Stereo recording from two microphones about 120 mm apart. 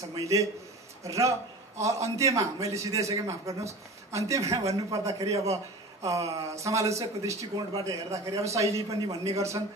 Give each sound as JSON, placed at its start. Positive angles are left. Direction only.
{"t": 0.2, "sound": "a man's voice", "side_deg": -25}